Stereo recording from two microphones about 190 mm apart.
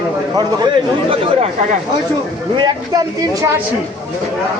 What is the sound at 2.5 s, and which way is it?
Speech, 20° right (ahead or behind).